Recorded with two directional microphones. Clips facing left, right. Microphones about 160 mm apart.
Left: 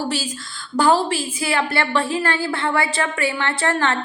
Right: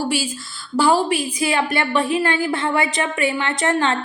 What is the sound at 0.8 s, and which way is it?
A woman's voice, 10° right (ahead or behind).